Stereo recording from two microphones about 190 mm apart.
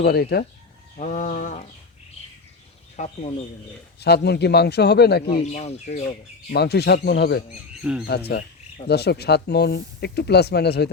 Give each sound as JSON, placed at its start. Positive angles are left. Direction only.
{"t": 0.0, "sound": "speech", "side_deg": 55}
{"t": 0.9, "sound": "speech", "side_deg": 40}
{"t": 2.9, "sound": "speech", "side_deg": 35}
{"t": 4.0, "sound": "speech", "side_deg": 60}
{"t": 5.4, "sound": "speech", "side_deg": 35}
{"t": 6.5, "sound": "speech", "side_deg": 60}
{"t": 7.8, "sound": "speech", "side_deg": -5}
{"t": 8.0, "sound": "speech", "side_deg": 60}